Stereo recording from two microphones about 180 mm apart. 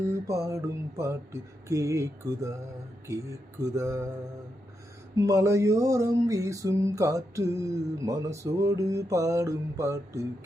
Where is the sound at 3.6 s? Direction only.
15° right (ahead or behind).